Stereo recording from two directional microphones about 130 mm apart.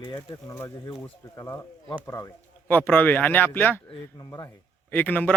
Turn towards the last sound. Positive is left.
turn(degrees=15)  # may be behind; listen again after turning